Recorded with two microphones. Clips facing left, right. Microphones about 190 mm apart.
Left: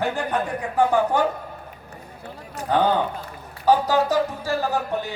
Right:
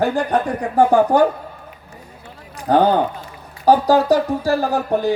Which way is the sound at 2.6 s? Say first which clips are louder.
Right 5 dB; 35° right (ahead or behind).